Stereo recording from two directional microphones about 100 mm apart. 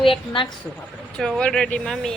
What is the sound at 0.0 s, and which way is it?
Speech, 60° left (ahead or behind).